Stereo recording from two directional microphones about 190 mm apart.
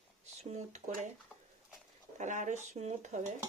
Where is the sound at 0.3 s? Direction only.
35° right (ahead or behind).